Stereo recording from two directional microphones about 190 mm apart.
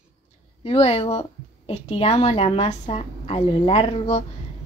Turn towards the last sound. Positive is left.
turn(degrees=30)  # may be behind; listen again after turning